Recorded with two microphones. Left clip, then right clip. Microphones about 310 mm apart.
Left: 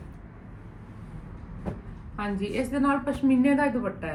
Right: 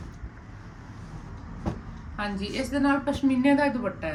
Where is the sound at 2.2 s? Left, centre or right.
Centre.